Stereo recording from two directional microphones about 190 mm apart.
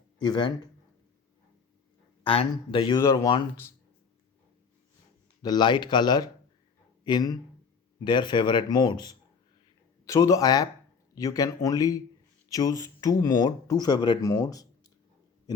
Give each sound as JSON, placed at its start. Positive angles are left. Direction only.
{"t": 0.2, "sound": "speech", "side_deg": 25}
{"t": 2.2, "sound": "speech", "side_deg": 30}
{"t": 5.4, "sound": "speech", "side_deg": 20}